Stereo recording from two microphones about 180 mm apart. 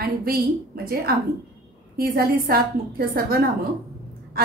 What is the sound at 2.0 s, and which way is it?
A woman's voice, 55° right (ahead or behind).